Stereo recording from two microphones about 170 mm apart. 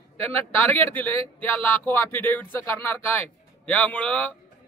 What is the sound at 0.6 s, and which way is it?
Speech, 10° left (ahead or behind).